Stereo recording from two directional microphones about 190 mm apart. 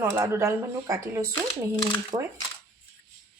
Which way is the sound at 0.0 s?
15° right (ahead or behind).